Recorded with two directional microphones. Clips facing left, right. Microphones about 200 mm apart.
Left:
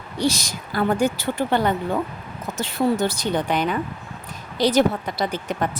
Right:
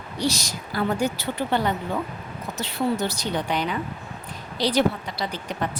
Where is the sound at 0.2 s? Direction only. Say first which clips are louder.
Left 3 dB; 50° left (ahead or behind).